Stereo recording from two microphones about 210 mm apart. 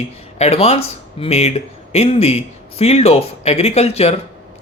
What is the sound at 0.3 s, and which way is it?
Speech, 30° left (ahead or behind).